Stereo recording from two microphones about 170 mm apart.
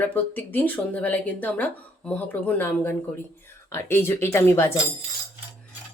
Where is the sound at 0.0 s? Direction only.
10° left (ahead or behind).